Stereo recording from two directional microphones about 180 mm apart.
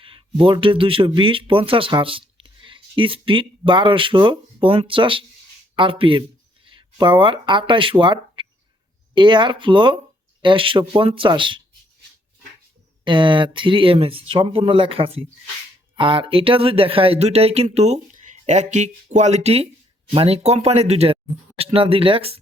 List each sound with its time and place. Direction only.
0.0 s speech: 30° right (ahead or behind)
13.1 s speech: 25° right (ahead or behind)